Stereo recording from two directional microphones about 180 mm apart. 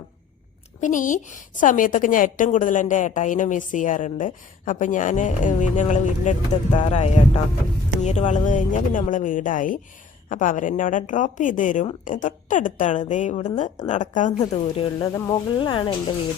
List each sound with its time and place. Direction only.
0.8 s a woman's voice: 45° left (ahead or behind)
14.8 s speech: 25° left (ahead or behind)